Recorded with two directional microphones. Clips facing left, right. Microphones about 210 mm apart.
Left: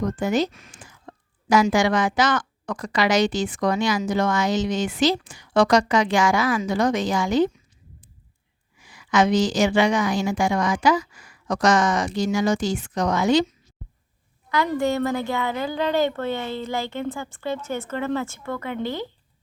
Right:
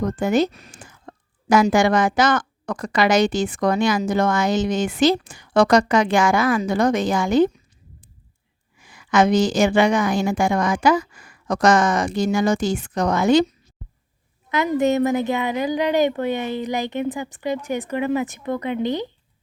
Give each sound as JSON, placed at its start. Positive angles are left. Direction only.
{"t": 0.0, "sound": "speech", "side_deg": -55}
{"t": 0.5, "sound": "whispering", "side_deg": -40}
{"t": 1.7, "sound": "a woman's voice", "side_deg": -50}
{"t": 8.8, "sound": "a woman's voice", "side_deg": -55}
{"t": 14.7, "sound": "speech", "side_deg": -20}